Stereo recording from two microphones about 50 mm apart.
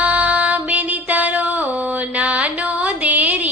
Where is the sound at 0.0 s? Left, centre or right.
Right.